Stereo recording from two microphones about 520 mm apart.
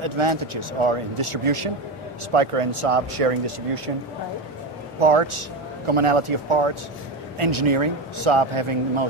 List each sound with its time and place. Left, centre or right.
0.0 s speech: right
2.3 s speech: right
5.0 s speech: right